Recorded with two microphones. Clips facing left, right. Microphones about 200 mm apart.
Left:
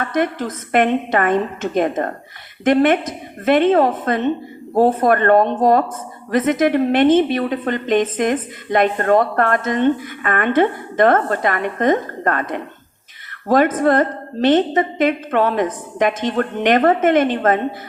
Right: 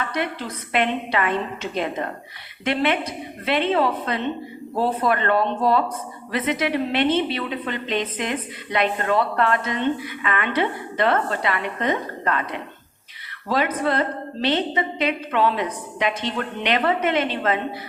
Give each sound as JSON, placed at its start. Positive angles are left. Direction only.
{"t": 0.0, "sound": "a woman's voice", "side_deg": 50}